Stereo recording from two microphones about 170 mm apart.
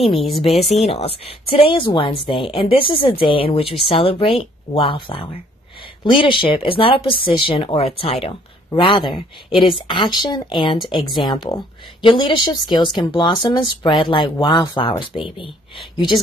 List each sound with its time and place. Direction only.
0.6 s speech: 35° left (ahead or behind)